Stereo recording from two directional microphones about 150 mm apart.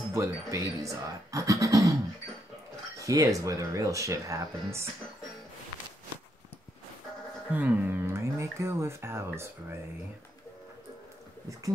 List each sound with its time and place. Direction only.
0.1 s speech: 20° right (ahead or behind)
3.0 s speech: 20° right (ahead or behind)
7.5 s speech: 10° right (ahead or behind)